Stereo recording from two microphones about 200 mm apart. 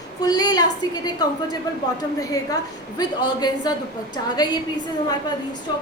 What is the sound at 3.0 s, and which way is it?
Speech, 20° left (ahead or behind).